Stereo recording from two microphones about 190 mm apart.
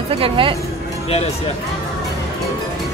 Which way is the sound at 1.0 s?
35° left (ahead or behind).